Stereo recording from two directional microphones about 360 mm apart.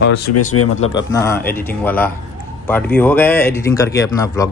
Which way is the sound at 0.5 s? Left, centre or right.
Left.